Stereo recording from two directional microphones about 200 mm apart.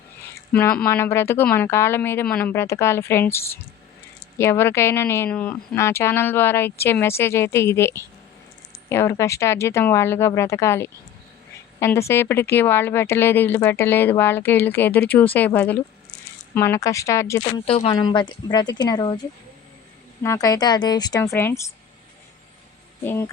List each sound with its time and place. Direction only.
0.5 s speech: 5° left (ahead or behind)
17.7 s speech: 30° left (ahead or behind)
20.2 s speech: 15° left (ahead or behind)
23.0 s speech: 15° left (ahead or behind)